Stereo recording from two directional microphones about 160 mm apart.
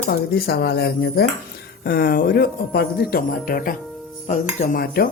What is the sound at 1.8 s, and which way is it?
Speech, 70° left (ahead or behind).